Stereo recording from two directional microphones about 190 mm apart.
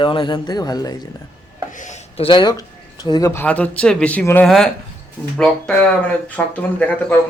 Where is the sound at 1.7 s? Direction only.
40° left (ahead or behind); by 2.6 s 25° left (ahead or behind).